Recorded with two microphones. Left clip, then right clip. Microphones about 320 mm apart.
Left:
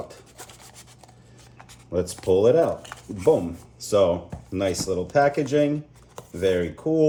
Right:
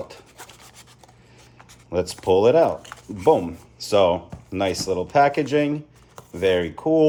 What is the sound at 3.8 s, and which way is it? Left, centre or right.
Speech, centre.